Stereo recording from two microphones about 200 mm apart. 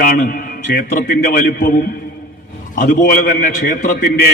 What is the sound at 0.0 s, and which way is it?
A man's voice, 45° left (ahead or behind).